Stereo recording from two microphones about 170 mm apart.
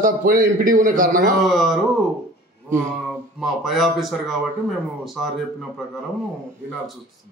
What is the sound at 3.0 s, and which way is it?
Speech, centre (ahead or behind).